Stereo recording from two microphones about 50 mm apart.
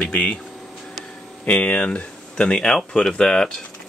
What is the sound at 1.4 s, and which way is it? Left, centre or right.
Speech, left.